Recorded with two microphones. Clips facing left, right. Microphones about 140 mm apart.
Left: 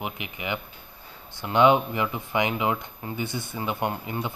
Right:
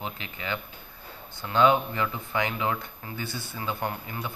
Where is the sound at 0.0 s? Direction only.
15° left (ahead or behind).